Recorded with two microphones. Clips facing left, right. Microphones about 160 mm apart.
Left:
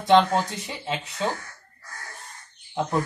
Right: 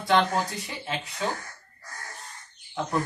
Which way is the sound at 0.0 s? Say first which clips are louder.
Left 5 dB; 25° left (ahead or behind).